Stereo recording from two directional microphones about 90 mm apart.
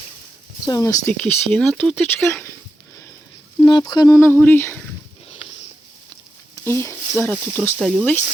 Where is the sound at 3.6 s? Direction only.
55° left (ahead or behind).